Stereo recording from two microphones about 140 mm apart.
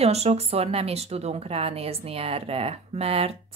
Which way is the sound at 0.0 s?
50° right (ahead or behind).